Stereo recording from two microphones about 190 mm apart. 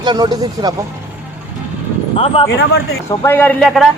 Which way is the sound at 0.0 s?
25° right (ahead or behind).